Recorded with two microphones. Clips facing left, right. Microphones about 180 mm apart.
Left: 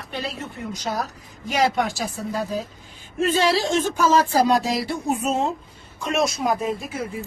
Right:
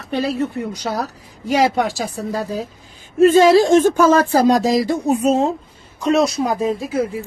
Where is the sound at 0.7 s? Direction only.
65° right (ahead or behind).